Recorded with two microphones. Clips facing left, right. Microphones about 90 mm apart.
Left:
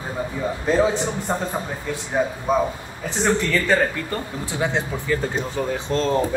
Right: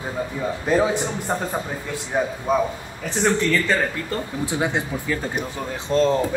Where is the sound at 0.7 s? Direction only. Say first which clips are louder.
Even; 20° left (ahead or behind).